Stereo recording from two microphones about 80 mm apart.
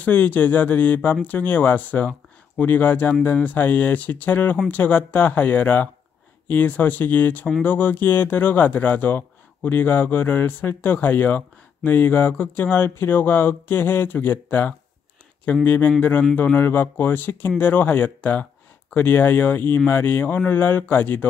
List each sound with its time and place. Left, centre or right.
0.0 s speech: centre